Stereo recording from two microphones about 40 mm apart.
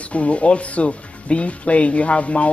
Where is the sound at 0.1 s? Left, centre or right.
Left.